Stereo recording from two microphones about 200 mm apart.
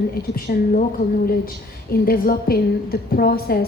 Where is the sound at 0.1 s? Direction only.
45° left (ahead or behind).